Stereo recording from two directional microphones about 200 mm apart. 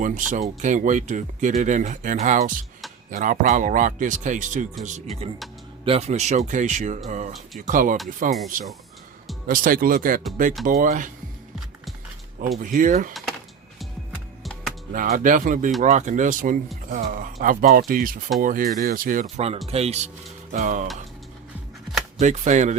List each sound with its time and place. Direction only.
0.0 s speech: 40° right (ahead or behind)
9.5 s speech: 45° right (ahead or behind)
12.6 s speech: 40° right (ahead or behind)
14.9 s speech: 45° right (ahead or behind)
22.2 s speech: 35° right (ahead or behind)